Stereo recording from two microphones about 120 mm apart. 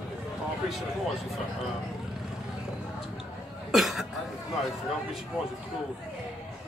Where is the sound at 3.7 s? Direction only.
Centre (ahead or behind).